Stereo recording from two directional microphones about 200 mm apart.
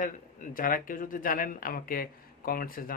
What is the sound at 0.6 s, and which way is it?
Speech, 45° left (ahead or behind).